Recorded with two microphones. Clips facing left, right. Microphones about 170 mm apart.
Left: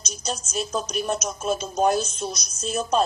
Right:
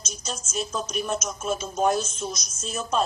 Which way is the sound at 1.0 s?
35° left (ahead or behind).